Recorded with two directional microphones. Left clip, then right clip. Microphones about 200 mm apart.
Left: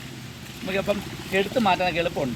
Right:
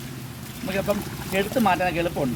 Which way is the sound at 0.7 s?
30° left (ahead or behind).